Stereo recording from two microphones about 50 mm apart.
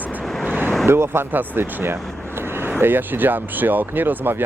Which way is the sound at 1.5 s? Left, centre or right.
Right.